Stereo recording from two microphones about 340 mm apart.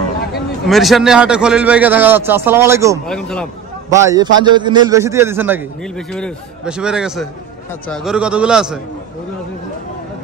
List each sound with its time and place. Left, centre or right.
0.7 s a man's voice: centre
3.9 s a man's voice: centre